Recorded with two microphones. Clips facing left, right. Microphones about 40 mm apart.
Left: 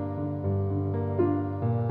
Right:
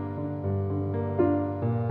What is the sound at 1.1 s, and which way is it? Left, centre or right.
Music, right.